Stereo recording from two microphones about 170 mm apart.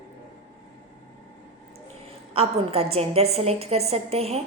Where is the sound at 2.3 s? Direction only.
35° right (ahead or behind).